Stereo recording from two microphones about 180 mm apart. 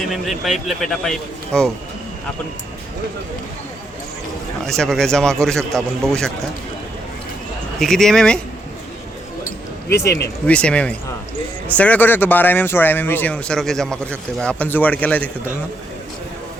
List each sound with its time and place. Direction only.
0.1 s speech: centre (ahead or behind)
4.6 s speech: centre (ahead or behind)
7.8 s speech: centre (ahead or behind)
9.9 s speech: 15° left (ahead or behind)